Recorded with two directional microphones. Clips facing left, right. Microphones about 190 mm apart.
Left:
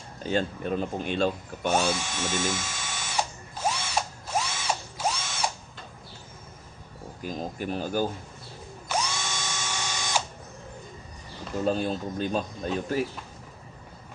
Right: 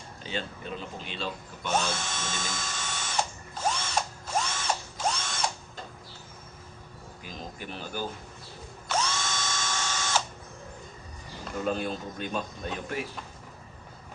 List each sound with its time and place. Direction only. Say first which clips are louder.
0.2 s speech: left 9 dB; 45° left (ahead or behind)
1.9 s speech: left 5 dB; 10° left (ahead or behind)
3.7 s ratchet: left 1 dB; 10° left (ahead or behind)
7.2 s speech: left 8 dB; 45° left (ahead or behind)
8.9 s drill: even; 10° left (ahead or behind)
11.6 s a man's voice: left 4 dB; 30° left (ahead or behind)